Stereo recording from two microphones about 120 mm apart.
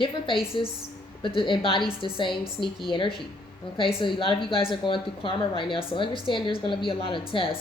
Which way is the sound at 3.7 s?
45° left (ahead or behind).